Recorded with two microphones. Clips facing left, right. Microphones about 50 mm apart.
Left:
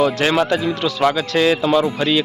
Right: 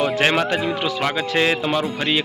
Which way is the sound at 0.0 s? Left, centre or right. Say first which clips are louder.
Left 2 dB; right.